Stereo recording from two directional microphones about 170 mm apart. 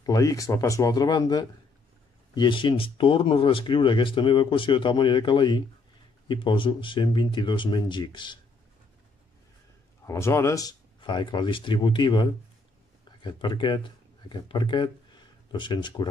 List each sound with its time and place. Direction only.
0.0 s speech: 20° left (ahead or behind)
10.0 s speech: 15° left (ahead or behind)